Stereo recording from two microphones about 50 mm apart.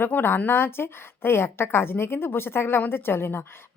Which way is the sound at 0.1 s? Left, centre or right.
Left.